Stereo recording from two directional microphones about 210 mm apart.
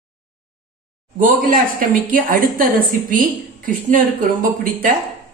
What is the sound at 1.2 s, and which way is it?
A woman's voice, 40° right (ahead or behind).